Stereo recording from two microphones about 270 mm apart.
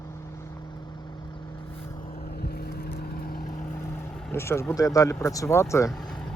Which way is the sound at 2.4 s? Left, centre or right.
Left.